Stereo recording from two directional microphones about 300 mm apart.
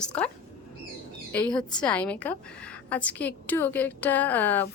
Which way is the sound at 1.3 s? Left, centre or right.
Centre.